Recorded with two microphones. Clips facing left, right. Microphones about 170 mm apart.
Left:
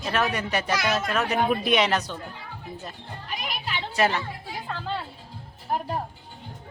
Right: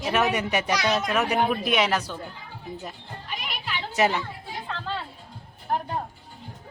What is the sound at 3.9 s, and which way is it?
Speech, 15° right (ahead or behind).